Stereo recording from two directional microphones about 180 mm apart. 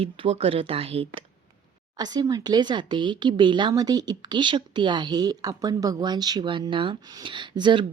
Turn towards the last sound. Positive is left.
turn(degrees=-25)  # may be behind; listen again after turning